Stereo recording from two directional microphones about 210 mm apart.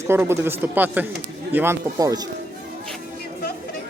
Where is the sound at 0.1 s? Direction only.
10° right (ahead or behind).